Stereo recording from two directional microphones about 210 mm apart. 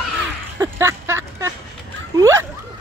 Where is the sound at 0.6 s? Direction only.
10° right (ahead or behind).